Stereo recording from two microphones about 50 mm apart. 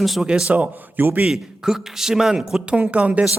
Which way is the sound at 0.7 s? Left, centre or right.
Right.